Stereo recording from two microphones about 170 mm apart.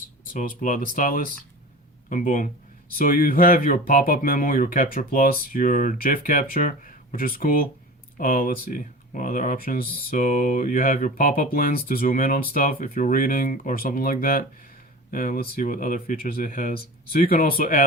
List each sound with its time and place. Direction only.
0.3 s speech: 50° left (ahead or behind)